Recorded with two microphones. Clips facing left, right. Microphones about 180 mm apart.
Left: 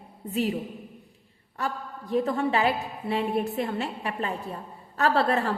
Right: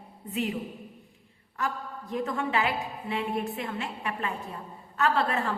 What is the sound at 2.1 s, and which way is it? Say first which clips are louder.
A woman's voice: left 5 dB; 35° left (ahead or behind).